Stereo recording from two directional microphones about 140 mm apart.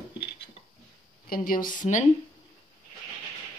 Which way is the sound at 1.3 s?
90° left.